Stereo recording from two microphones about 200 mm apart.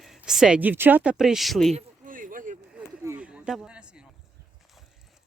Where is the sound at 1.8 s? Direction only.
40° right (ahead or behind).